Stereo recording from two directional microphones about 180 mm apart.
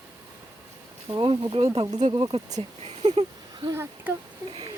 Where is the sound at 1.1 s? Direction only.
25° right (ahead or behind).